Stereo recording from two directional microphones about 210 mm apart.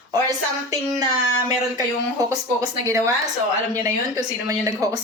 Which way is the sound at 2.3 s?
15° right (ahead or behind).